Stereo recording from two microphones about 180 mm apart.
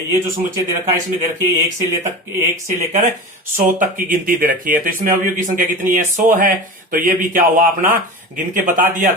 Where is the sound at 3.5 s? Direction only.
50° right (ahead or behind).